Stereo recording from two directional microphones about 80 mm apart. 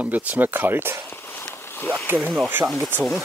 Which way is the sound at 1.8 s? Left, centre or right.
Left.